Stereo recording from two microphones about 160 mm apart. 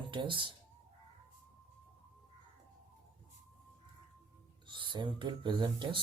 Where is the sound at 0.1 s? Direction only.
30° right (ahead or behind).